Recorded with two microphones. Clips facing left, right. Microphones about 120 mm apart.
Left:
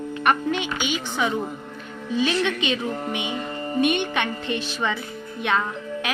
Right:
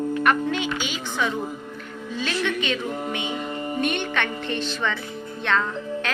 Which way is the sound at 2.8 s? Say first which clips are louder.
Left 1 dB; 10° right (ahead or behind).